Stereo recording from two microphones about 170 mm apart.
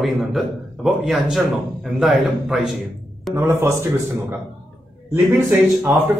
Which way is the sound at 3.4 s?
15° right (ahead or behind).